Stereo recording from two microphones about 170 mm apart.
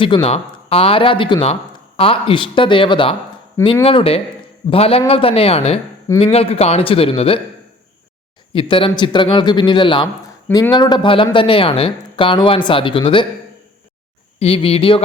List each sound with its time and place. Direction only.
0.0 s speech: 30° left (ahead or behind)
8.5 s a man's voice: 30° left (ahead or behind)
14.3 s speech: 35° left (ahead or behind)